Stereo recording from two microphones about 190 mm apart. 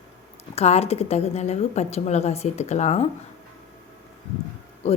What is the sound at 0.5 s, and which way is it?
A woman's voice, 35° left (ahead or behind).